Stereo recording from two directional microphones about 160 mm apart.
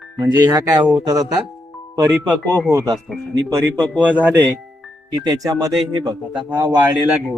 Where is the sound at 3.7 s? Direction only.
10° left (ahead or behind).